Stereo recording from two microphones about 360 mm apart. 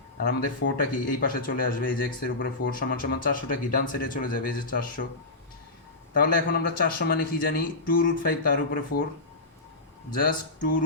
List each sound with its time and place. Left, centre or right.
0.2 s speech: left
6.1 s speech: left
8.9 s speech: left
10.1 s speech: left